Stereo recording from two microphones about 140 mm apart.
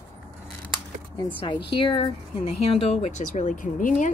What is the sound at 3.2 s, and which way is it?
Speech, 65° left (ahead or behind).